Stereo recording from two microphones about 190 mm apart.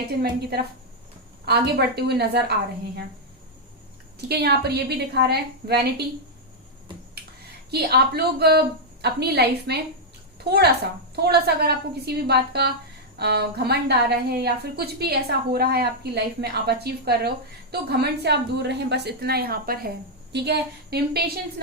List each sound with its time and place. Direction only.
0.2 s a woman's voice: 55° right (ahead or behind)
4.3 s a woman's voice: 60° right (ahead or behind)
7.7 s a woman's voice: 55° right (ahead or behind)